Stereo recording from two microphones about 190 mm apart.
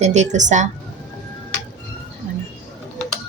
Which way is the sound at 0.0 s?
35° right (ahead or behind).